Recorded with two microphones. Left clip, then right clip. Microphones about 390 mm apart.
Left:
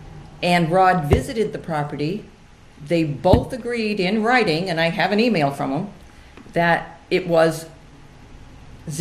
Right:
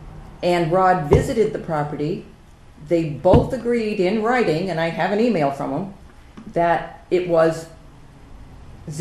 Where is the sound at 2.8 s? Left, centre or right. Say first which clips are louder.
Right 1 dB; left.